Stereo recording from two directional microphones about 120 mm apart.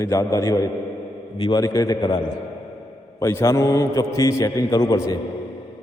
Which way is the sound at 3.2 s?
25° left (ahead or behind).